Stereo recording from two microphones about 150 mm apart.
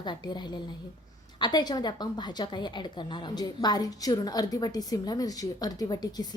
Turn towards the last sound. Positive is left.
turn(degrees=25)  # may be behind; listen again after turning